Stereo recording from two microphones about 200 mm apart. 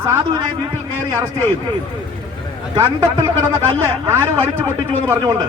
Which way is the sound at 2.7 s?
15° right (ahead or behind).